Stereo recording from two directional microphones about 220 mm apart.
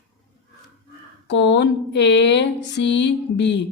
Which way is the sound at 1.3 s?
55° left (ahead or behind).